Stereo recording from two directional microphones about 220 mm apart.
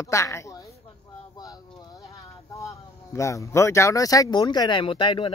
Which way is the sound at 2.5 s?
15° left (ahead or behind).